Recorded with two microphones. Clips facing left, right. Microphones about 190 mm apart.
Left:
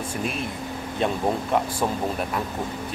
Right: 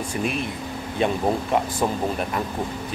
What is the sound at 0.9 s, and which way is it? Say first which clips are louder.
Speech: right 2 dB; centre (ahead or behind).